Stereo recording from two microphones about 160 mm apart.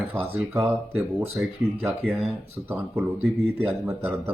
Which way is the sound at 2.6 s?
10° right (ahead or behind).